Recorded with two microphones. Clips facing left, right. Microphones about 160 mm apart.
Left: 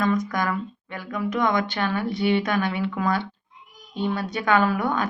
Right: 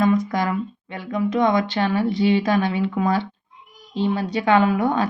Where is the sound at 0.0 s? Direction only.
30° right (ahead or behind).